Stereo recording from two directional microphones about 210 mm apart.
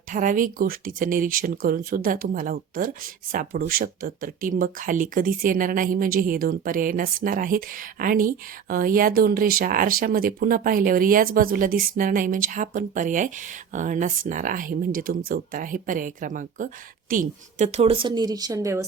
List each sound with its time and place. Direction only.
0.1 s a woman's voice: 40° right (ahead or behind); by 18.9 s 15° right (ahead or behind)